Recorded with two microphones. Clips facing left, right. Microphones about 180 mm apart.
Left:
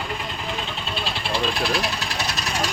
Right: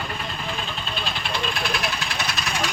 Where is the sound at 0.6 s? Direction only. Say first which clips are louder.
Left 1 dB; 30° left (ahead or behind).